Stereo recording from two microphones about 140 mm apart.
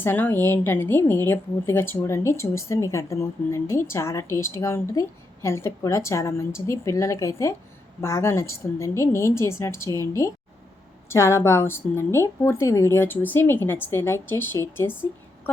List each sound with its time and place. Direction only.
0.0 s a woman's voice: 15° left (ahead or behind)